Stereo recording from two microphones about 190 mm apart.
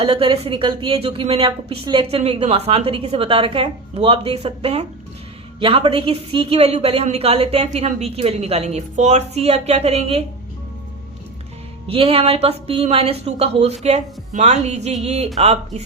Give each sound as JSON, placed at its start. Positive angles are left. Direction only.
{"t": 0.0, "sound": "a woman's voice", "side_deg": -25}
{"t": 11.9, "sound": "a woman's voice", "side_deg": -30}